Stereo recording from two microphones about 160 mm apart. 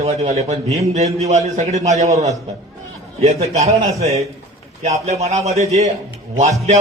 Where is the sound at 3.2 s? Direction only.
40° right (ahead or behind).